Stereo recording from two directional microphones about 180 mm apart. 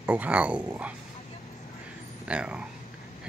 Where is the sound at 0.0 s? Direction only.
10° right (ahead or behind).